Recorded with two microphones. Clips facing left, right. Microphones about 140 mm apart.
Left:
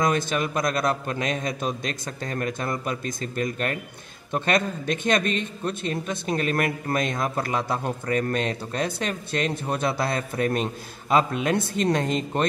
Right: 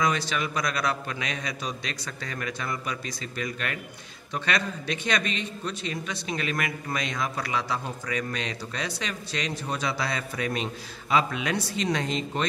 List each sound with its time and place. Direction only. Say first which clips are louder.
0.0 s a man's voice: left 3 dB; 50° left (ahead or behind)